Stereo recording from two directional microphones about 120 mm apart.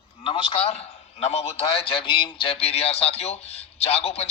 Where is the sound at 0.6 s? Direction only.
60° left (ahead or behind).